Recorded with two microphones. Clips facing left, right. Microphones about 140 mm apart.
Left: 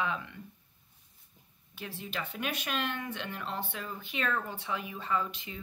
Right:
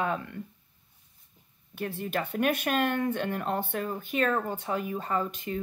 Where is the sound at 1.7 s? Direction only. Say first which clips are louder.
Right 8 dB; 50° right (ahead or behind).